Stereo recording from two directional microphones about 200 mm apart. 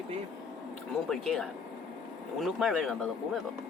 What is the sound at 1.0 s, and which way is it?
Speech, 5° left (ahead or behind).